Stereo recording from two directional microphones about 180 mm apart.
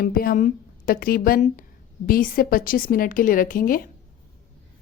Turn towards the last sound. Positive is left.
turn(degrees=50)  # may be behind; listen again after turning